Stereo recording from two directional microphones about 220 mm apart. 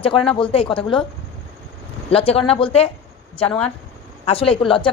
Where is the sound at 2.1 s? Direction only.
25° left (ahead or behind).